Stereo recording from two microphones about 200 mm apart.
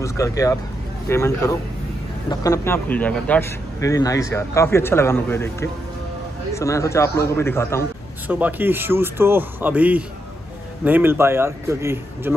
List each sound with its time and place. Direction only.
0.0 s a man's voice: 15° left (ahead or behind)
8.3 s speech: 10° right (ahead or behind)